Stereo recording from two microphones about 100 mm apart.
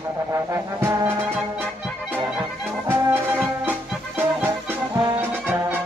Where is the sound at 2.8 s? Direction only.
15° right (ahead or behind).